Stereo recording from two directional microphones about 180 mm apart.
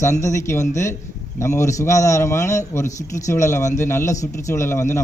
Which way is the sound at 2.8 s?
40° left (ahead or behind).